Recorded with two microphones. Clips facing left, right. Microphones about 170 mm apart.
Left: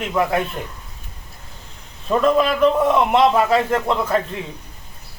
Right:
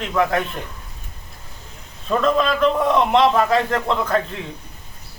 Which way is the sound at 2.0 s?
10° left (ahead or behind).